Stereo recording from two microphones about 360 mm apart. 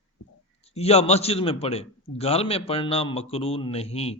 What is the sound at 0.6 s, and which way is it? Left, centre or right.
A man's voice, centre.